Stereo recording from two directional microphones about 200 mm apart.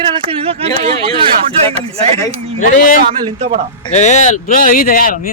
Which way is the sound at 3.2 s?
30° right (ahead or behind).